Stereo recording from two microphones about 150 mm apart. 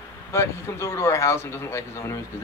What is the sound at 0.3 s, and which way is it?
Speech, 20° left (ahead or behind).